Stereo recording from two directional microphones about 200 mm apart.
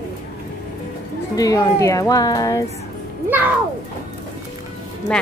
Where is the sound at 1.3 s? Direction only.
20° left (ahead or behind).